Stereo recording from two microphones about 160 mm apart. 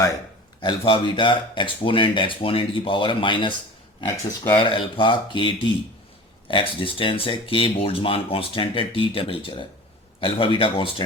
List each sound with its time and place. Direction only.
0.6 s speech: 30° left (ahead or behind)
4.5 s speech: 30° left (ahead or behind)